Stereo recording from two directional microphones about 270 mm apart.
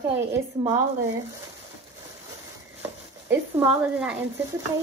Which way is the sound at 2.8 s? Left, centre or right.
Centre.